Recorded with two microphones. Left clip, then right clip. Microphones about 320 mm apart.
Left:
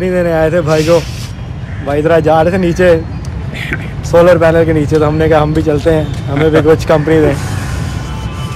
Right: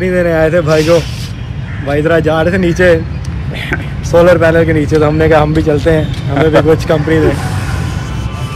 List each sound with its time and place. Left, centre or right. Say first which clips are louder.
0.0 s speech: right 1 dB; centre
1.9 s speech: left 2 dB; centre
4.1 s speech: even; centre